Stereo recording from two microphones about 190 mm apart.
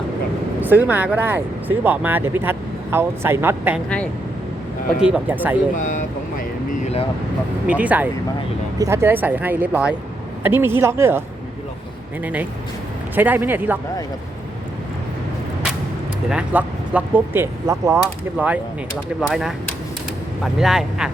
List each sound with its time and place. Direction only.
0.6 s speech: 10° right (ahead or behind)
5.0 s speech: 10° right (ahead or behind)
5.7 s speech: 45° left (ahead or behind)
7.7 s speech: 10° right (ahead or behind)
12.2 s speech: 10° right (ahead or behind)
16.3 s speech: 5° right (ahead or behind)